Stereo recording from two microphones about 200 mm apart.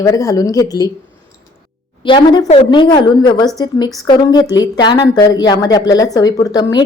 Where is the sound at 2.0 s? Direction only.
25° left (ahead or behind).